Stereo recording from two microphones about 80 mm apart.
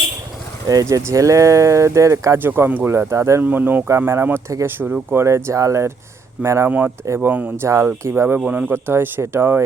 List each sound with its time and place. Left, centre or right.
0.7 s speech: right
2.4 s speech: right
3.4 s speech: right
3.8 s speech: right
6.7 s speech: right
8.4 s speech: centre